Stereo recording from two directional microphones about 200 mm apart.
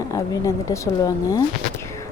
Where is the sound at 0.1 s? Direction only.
15° left (ahead or behind).